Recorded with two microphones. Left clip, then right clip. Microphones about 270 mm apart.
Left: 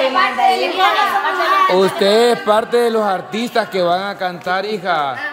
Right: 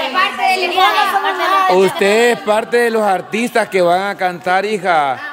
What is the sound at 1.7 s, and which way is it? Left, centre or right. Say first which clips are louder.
A man's voice: right 1 dB; centre.